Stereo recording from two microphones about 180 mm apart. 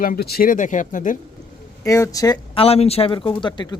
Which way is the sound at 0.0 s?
55° left (ahead or behind).